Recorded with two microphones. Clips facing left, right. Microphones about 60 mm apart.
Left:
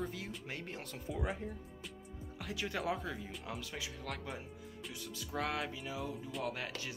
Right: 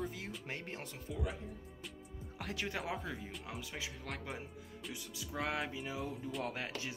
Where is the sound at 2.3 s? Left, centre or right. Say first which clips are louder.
Even; right.